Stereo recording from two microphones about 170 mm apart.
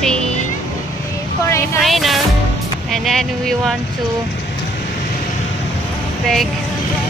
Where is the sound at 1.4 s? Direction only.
15° left (ahead or behind).